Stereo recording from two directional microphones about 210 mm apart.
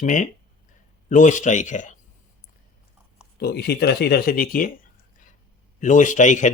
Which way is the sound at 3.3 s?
50° left (ahead or behind).